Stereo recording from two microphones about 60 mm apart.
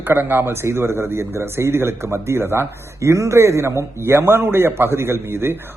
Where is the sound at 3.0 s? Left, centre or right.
Right.